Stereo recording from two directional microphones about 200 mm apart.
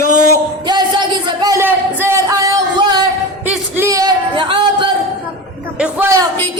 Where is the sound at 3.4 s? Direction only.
10° right (ahead or behind); by 4.9 s 25° right (ahead or behind).